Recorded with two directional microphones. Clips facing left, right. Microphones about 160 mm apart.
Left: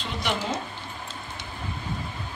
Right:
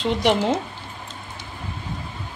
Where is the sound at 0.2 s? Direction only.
65° right (ahead or behind).